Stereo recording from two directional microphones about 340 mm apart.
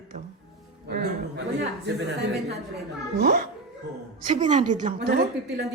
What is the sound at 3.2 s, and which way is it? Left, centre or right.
A woman's voice, right.